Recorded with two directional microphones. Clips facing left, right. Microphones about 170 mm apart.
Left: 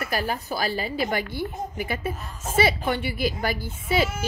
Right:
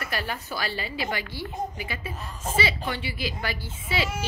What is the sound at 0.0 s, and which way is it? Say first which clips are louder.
A woman's voice: left 5 dB; 40° left (ahead or behind).